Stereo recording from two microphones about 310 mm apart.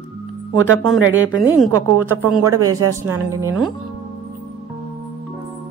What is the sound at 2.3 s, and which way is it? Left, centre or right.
Speech, centre.